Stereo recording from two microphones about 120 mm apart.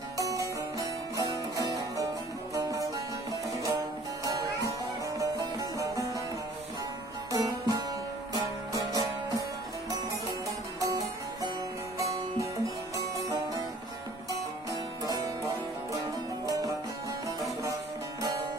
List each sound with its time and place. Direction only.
0.2 s music: 30° right (ahead or behind)
7.3 s music: 30° right (ahead or behind)
10.8 s music: 30° right (ahead or behind)
16.5 s music: 30° right (ahead or behind)